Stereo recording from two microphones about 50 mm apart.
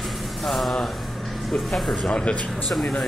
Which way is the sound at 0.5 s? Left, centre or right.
Centre.